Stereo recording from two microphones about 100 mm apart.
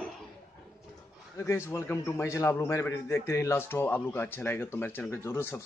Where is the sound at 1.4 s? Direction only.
30° left (ahead or behind).